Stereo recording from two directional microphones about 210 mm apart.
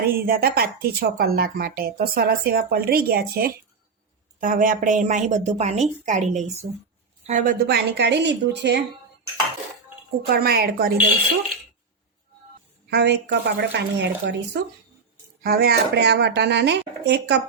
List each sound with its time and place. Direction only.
0.0 s a woman's voice: 45° right (ahead or behind)
7.7 s speech: 55° right (ahead or behind)
10.2 s speech: 45° right (ahead or behind)
12.9 s speech: 55° right (ahead or behind)